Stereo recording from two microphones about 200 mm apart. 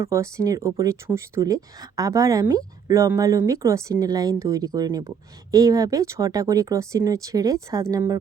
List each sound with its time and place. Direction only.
0.0 s speech: 15° right (ahead or behind)